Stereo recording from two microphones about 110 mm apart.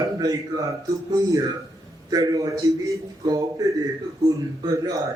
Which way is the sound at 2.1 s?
35° right (ahead or behind).